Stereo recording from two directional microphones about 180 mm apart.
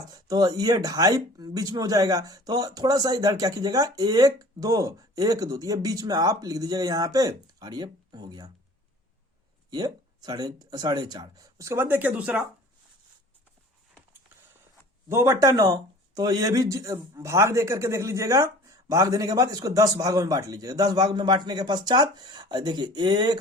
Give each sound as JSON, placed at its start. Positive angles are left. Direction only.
{"t": 0.0, "sound": "speech", "side_deg": -20}
{"t": 9.6, "sound": "speech", "side_deg": -20}
{"t": 15.1, "sound": "speech", "side_deg": -15}